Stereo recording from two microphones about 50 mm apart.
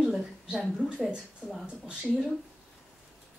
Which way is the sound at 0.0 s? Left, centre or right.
Centre.